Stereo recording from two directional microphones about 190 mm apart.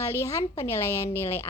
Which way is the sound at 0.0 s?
15° left (ahead or behind).